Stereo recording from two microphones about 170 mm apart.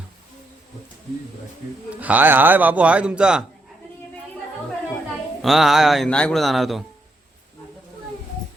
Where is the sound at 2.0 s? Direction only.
10° right (ahead or behind).